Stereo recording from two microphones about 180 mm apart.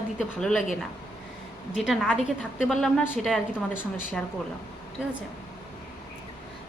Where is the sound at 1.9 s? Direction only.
5° right (ahead or behind).